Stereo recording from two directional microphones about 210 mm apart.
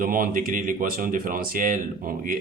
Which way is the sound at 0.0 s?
45° right (ahead or behind).